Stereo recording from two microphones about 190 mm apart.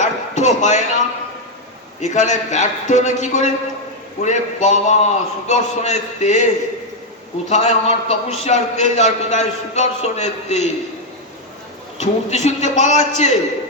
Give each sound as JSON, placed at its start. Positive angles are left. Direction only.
{"t": 0.0, "sound": "a sound", "side_deg": 40}
{"t": 2.0, "sound": "a man's voice", "side_deg": 40}
{"t": 7.5, "sound": "a man's voice", "side_deg": 35}
{"t": 11.9, "sound": "a man's voice", "side_deg": 35}